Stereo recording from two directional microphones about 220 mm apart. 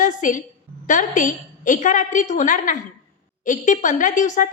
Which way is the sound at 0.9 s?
35° left (ahead or behind).